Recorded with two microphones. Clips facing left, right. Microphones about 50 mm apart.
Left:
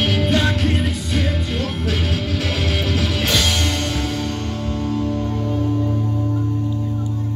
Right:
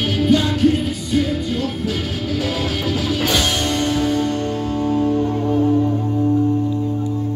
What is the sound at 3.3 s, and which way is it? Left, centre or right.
Music, right.